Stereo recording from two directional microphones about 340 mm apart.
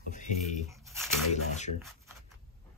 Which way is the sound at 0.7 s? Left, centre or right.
Centre.